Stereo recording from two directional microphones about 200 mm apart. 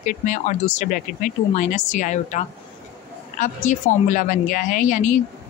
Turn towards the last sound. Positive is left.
turn(degrees=40)  # may be behind; listen again after turning